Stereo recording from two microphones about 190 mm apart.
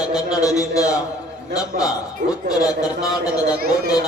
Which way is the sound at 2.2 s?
45° right (ahead or behind).